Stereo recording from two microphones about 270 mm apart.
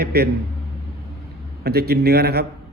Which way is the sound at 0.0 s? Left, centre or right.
Right.